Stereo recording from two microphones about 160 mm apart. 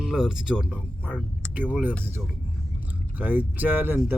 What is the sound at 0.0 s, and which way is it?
Speech, 5° right (ahead or behind).